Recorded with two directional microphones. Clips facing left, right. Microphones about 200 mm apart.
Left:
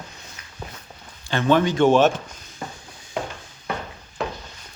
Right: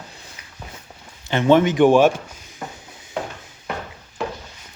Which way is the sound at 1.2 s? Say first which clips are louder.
Right 4 dB; 20° right (ahead or behind).